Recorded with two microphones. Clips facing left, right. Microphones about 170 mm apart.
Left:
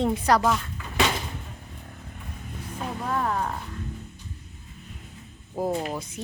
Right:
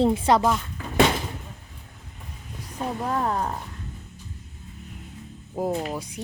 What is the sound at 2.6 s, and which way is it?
Speech, 30° right (ahead or behind).